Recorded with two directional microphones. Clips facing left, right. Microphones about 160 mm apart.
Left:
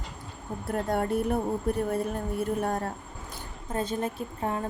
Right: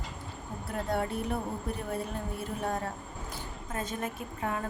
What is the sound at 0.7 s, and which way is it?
Speech, 45° left (ahead or behind).